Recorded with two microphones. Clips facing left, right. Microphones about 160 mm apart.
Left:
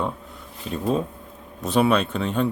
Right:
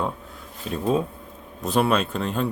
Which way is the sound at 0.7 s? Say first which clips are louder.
Right 1 dB; centre (ahead or behind).